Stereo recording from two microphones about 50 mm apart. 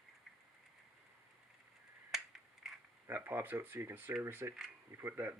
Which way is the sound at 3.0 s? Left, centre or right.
Right.